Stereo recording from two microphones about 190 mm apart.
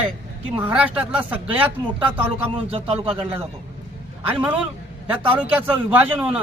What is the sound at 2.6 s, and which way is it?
Speech, 30° right (ahead or behind).